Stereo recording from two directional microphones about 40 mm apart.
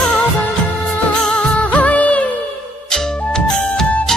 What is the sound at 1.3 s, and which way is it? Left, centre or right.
Music of bollywood, left.